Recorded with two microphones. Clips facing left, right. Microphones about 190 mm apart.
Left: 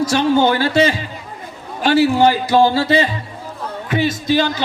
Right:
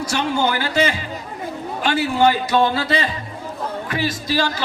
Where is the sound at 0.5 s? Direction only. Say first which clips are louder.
Left 5 dB; 30° left (ahead or behind).